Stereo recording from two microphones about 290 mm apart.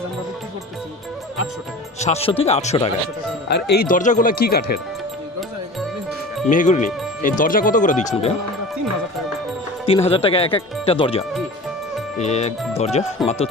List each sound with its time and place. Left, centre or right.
2.0 s speech: left
3.5 s speech: left
6.5 s speech: left
9.8 s speech: centre